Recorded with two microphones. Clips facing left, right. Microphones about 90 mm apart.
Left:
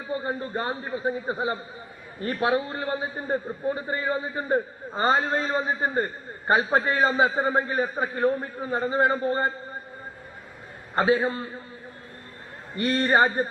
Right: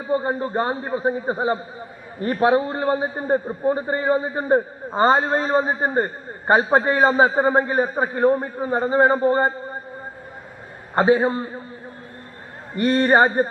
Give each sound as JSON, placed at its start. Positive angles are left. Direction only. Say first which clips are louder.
{"t": 0.1, "sound": "a man's voice", "louder": "right 7 dB", "side_deg": -30}
{"t": 10.9, "sound": "a man's voice", "louder": "right 5 dB", "side_deg": -30}
{"t": 12.7, "sound": "a man's voice", "louder": "right 5 dB", "side_deg": -35}